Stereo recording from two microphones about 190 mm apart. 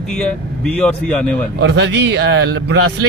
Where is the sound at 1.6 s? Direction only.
65° right (ahead or behind).